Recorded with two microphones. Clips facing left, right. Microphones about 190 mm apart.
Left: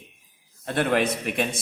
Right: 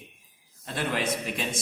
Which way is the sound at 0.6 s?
60° left (ahead or behind).